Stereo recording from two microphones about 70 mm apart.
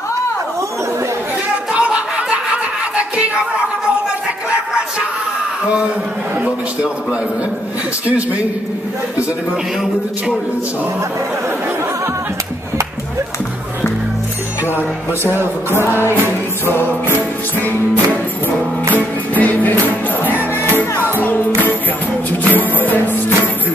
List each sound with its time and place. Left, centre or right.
1.7 s music: centre
6.4 s a man's voice: centre
19.3 s music: left
20.9 s music: left
22.5 s music: left